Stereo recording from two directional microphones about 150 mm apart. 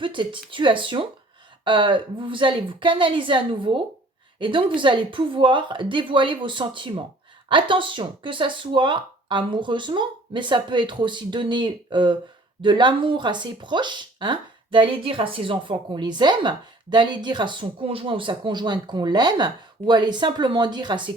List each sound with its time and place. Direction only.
0.0 s a woman's voice: 35° right (ahead or behind)